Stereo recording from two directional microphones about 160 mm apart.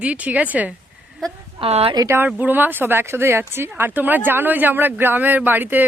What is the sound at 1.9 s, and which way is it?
Speech, 20° right (ahead or behind).